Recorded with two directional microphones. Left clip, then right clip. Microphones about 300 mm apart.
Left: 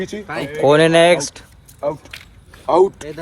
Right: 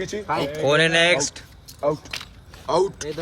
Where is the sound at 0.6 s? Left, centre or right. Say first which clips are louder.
Left 7 dB; centre.